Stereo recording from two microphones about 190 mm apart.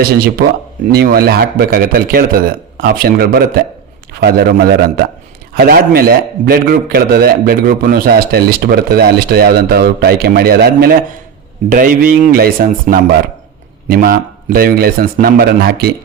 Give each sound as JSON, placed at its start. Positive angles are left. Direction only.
{"t": 0.0, "sound": "a man's voice", "side_deg": -55}